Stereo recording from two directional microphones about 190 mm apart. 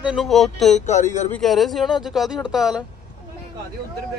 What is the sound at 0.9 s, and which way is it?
Speech, 35° left (ahead or behind).